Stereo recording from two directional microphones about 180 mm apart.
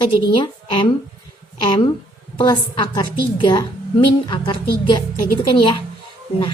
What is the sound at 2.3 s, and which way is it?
Speech, 25° left (ahead or behind).